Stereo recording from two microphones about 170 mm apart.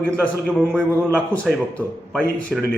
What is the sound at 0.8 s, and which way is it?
Speech, 15° right (ahead or behind).